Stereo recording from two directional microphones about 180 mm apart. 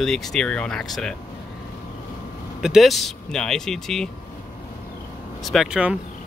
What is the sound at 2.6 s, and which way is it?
A man's voice, centre (ahead or behind).